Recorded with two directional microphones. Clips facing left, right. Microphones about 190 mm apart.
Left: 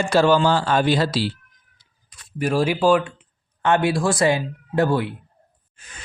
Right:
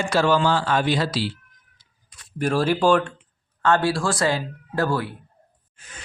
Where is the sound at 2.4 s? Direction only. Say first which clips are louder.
Left 1 dB; 10° left (ahead or behind).